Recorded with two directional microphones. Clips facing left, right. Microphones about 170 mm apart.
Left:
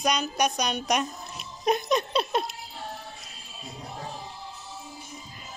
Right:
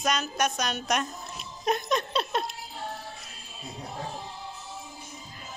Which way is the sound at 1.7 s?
Centre (ahead or behind).